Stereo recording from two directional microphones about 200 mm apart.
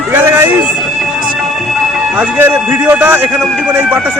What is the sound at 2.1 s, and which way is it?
Speech, 10° right (ahead or behind).